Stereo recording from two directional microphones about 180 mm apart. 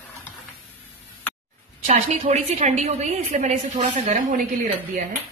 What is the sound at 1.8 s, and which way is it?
A woman's voice, 35° right (ahead or behind).